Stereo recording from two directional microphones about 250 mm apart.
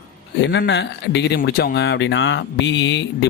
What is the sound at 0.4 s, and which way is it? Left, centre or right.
Speech, left.